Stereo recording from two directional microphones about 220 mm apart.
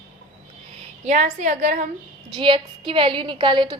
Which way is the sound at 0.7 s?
30° right (ahead or behind).